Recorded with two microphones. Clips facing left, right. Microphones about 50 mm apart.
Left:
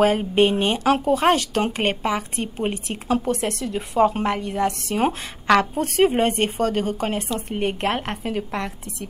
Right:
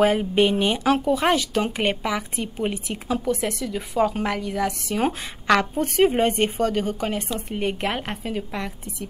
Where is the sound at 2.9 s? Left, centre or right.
Centre.